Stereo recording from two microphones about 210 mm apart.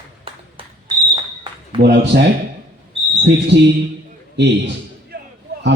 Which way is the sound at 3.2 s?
55° right (ahead or behind).